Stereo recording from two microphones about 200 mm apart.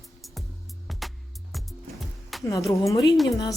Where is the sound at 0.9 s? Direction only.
Centre (ahead or behind).